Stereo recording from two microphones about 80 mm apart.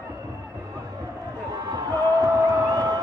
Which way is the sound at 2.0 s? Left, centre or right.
Right.